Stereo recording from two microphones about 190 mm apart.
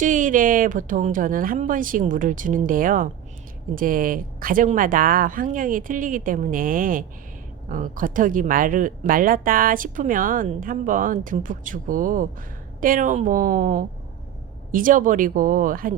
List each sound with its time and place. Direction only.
0.0 s speech: 40° right (ahead or behind)